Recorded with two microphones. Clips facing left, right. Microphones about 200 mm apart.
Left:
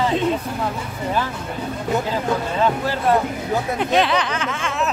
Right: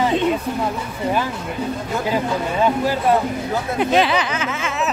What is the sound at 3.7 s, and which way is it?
Speech, 5° right (ahead or behind).